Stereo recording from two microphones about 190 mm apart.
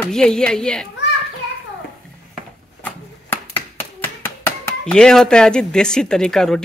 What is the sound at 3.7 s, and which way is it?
Speech, 15° left (ahead or behind).